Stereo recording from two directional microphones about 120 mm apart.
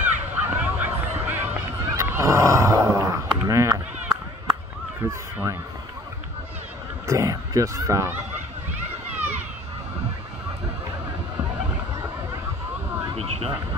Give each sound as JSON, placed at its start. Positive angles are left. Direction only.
{"t": 0.0, "sound": "run", "side_deg": -20}
{"t": 5.0, "sound": "speech", "side_deg": -20}
{"t": 7.1, "sound": "speech", "side_deg": -25}
{"t": 13.1, "sound": "a sound", "side_deg": -60}